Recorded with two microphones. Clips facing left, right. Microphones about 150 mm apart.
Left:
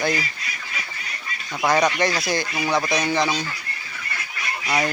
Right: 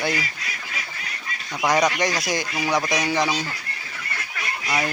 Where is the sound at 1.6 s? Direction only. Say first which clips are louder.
Left 1 dB; 10° right (ahead or behind).